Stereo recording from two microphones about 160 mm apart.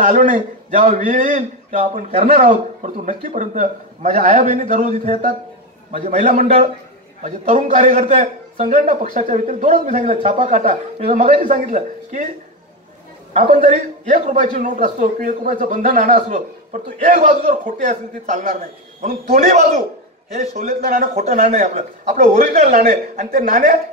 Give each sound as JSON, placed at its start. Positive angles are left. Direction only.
{"t": 0.0, "sound": "a man's voice", "side_deg": -50}
{"t": 13.3, "sound": "a man's voice", "side_deg": -50}